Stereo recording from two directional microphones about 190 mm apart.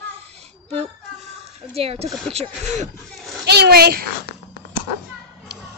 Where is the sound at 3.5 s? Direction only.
55° right (ahead or behind).